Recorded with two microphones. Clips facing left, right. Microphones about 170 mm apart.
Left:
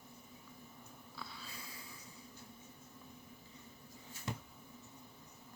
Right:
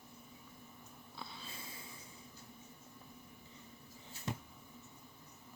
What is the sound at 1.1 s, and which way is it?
Snort, 25° right (ahead or behind).